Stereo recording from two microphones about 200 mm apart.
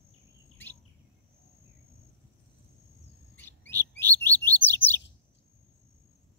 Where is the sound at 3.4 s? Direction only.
10° left (ahead or behind).